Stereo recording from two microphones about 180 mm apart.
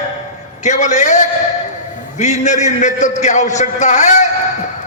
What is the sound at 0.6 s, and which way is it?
A man's voice, 40° left (ahead or behind).